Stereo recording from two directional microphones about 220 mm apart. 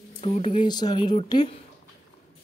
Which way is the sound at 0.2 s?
30° left (ahead or behind).